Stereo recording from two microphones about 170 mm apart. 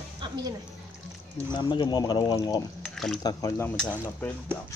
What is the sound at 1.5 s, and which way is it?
Speech, 25° left (ahead or behind).